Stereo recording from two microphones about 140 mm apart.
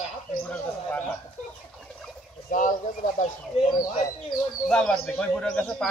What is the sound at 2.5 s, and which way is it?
Speech, 70° left (ahead or behind).